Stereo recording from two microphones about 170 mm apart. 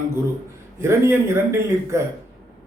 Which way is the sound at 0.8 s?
15° right (ahead or behind).